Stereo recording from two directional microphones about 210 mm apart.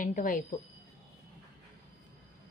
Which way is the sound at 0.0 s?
40° left (ahead or behind).